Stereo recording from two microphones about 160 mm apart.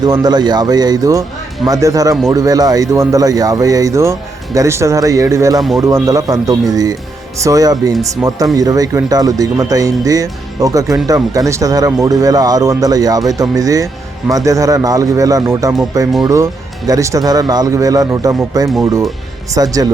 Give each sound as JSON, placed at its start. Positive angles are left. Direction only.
{"t": 0.0, "sound": "speech", "side_deg": -25}
{"t": 8.2, "sound": "speech", "side_deg": -5}
{"t": 8.5, "sound": "speech", "side_deg": -20}